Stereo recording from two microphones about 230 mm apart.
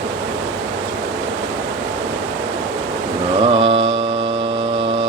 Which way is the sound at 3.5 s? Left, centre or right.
Right.